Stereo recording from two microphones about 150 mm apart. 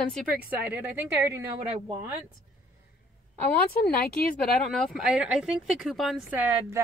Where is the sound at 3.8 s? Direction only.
75° left (ahead or behind).